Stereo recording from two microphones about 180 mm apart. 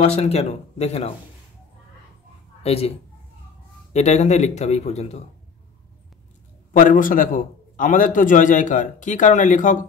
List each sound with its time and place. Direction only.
0.0 s speech: 35° left (ahead or behind)
2.6 s a woman's voice: 35° left (ahead or behind)
3.9 s speech: 40° left (ahead or behind)
6.8 s a man's voice: 50° left (ahead or behind)